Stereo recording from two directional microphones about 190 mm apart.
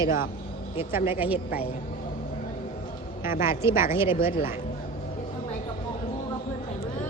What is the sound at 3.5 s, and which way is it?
Speech, 15° right (ahead or behind).